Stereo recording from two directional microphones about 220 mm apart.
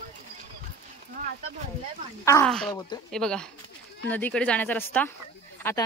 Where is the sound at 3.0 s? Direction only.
5° left (ahead or behind).